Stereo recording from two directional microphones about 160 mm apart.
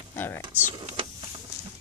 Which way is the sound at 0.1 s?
15° left (ahead or behind).